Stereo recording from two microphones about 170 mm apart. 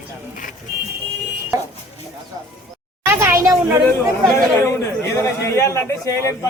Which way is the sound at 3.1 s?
15° right (ahead or behind).